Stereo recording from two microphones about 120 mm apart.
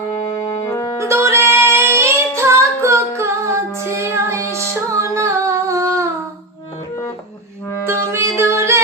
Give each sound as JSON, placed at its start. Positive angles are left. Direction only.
{"t": 0.6, "sound": "music", "side_deg": 25}
{"t": 0.9, "sound": "music", "side_deg": -25}
{"t": 7.9, "sound": "music", "side_deg": -20}